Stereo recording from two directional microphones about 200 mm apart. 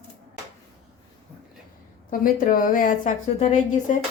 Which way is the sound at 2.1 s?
45° left (ahead or behind).